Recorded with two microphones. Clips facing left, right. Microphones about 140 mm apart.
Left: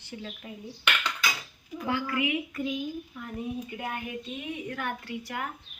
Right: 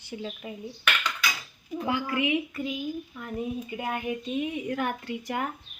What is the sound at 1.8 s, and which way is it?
Speech, 20° right (ahead or behind).